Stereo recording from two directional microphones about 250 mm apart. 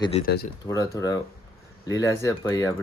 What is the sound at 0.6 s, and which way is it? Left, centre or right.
Speech, centre.